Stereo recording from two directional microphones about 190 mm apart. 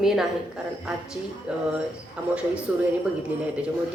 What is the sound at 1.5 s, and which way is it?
A woman's voice, 5° right (ahead or behind).